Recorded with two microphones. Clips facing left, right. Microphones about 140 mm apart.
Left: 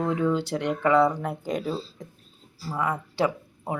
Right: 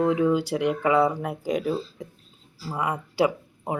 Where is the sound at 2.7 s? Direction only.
15° right (ahead or behind).